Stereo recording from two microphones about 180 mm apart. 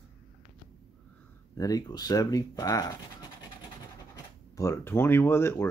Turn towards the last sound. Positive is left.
turn(degrees=15)  # may be behind; listen again after turning